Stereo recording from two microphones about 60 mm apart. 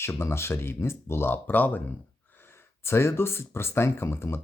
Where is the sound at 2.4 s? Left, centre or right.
Left.